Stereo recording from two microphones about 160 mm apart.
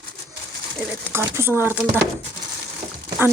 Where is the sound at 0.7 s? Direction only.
15° right (ahead or behind).